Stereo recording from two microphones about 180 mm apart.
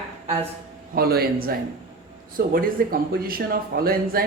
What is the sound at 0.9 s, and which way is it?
Speech, 60° right (ahead or behind).